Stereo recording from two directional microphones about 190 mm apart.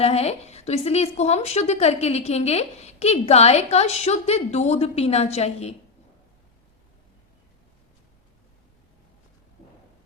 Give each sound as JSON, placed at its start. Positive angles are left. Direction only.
{"t": 0.0, "sound": "speech", "side_deg": 35}